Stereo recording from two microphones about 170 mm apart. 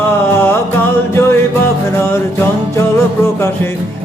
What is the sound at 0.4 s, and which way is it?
Music, 15° left (ahead or behind).